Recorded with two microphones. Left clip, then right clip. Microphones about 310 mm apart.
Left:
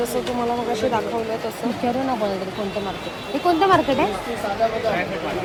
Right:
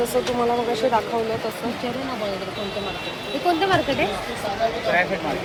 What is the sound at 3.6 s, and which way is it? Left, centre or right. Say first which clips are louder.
Speech: left 6 dB; left.